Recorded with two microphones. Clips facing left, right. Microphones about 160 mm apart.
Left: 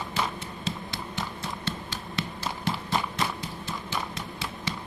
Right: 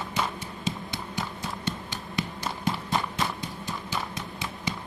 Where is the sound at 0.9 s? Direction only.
15° right (ahead or behind).